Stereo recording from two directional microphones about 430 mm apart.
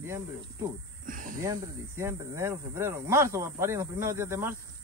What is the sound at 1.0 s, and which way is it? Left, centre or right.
Speech, centre.